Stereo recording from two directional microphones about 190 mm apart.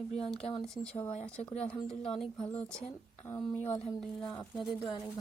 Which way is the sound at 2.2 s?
25° left (ahead or behind).